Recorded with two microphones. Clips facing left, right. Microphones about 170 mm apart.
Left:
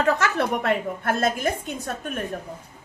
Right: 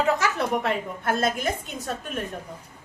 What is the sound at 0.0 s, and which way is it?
A woman's voice, 65° left (ahead or behind).